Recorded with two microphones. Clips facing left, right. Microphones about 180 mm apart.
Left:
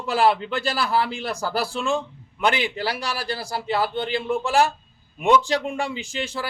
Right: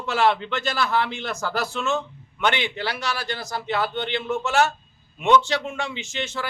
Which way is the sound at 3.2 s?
35° left (ahead or behind).